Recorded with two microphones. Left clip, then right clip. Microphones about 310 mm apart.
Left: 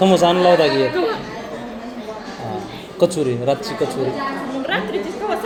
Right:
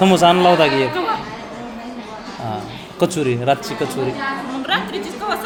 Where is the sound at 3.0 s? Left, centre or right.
Right.